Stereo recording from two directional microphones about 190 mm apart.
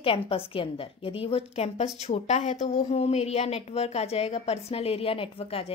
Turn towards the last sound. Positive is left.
turn(degrees=30)  # may be behind; listen again after turning